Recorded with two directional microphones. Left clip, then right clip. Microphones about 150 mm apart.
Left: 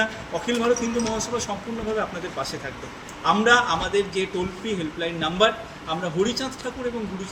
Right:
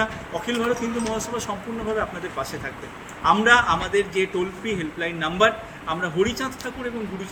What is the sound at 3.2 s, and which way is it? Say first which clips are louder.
A man's voice: right 2 dB; 5° left (ahead or behind).